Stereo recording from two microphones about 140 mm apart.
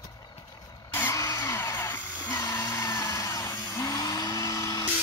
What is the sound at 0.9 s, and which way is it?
Vehicle, 20° left (ahead or behind).